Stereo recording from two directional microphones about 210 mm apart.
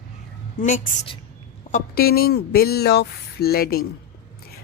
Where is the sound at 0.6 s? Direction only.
35° left (ahead or behind).